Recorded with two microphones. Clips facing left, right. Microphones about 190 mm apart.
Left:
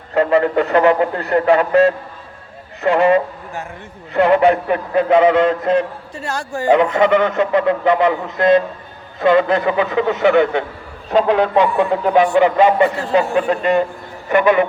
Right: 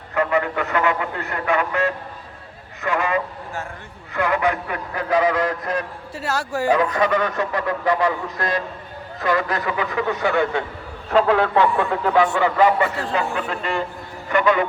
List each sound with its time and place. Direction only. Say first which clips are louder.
0.1 s speech: left 7 dB; 30° left (ahead or behind)
6.1 s speech: even; 5° right (ahead or behind)
6.7 s speech: left 7 dB; 25° left (ahead or behind)